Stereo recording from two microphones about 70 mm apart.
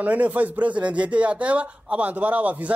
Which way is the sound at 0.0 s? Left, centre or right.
Right.